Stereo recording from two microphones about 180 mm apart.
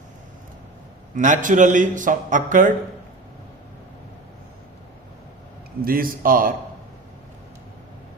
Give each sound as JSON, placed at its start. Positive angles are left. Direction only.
{"t": 1.1, "sound": "a man's voice", "side_deg": -45}
{"t": 5.8, "sound": "a man's voice", "side_deg": -55}